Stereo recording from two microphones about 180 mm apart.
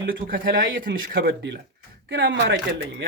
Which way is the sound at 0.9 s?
60° right (ahead or behind).